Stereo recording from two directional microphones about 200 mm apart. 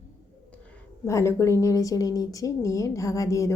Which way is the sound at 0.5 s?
5° left (ahead or behind).